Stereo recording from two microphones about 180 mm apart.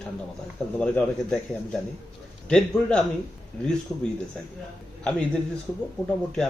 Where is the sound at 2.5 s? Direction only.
5° left (ahead or behind).